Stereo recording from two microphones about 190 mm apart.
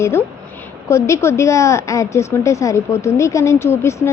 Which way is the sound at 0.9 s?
15° left (ahead or behind).